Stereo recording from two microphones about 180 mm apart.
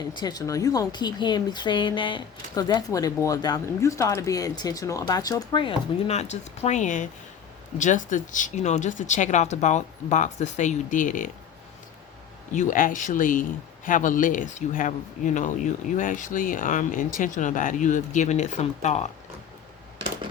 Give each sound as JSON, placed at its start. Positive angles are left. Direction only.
{"t": 0.1, "sound": "a woman's voice", "side_deg": 25}
{"t": 12.5, "sound": "speech", "side_deg": 45}